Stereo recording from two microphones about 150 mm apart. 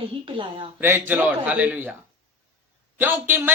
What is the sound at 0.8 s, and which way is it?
Speech, 15° right (ahead or behind).